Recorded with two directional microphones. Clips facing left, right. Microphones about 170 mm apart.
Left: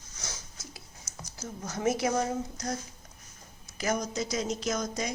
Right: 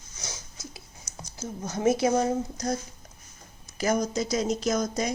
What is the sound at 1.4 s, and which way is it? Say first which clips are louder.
A woman's voice: right 5 dB; 25° right (ahead or behind).